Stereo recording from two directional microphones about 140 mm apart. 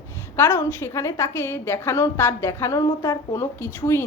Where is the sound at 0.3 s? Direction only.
15° left (ahead or behind).